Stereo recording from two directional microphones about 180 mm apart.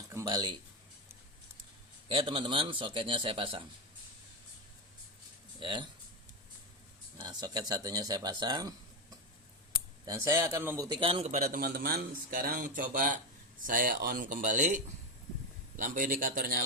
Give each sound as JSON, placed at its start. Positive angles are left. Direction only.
{"t": 0.1, "sound": "speech", "side_deg": -20}
{"t": 2.0, "sound": "a man's voice", "side_deg": -30}
{"t": 5.5, "sound": "a man's voice", "side_deg": -25}
{"t": 7.2, "sound": "a man's voice", "side_deg": -20}
{"t": 10.1, "sound": "a man's voice", "side_deg": -20}
{"t": 10.8, "sound": "a man's voice", "side_deg": -25}
{"t": 11.3, "sound": "speech", "side_deg": -50}